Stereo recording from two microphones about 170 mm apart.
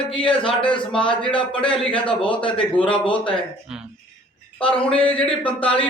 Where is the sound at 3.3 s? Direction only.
5° right (ahead or behind).